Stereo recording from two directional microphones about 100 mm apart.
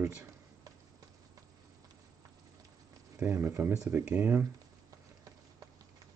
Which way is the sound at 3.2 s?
20° right (ahead or behind).